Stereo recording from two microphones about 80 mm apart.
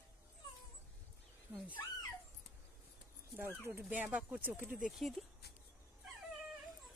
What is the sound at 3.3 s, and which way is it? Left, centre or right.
Speech, right.